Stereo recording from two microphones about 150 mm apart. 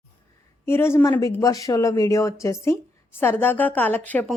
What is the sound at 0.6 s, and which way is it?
Speech, 15° left (ahead or behind).